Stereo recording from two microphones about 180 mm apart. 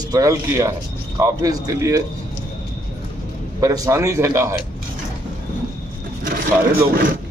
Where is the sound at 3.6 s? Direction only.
20° right (ahead or behind).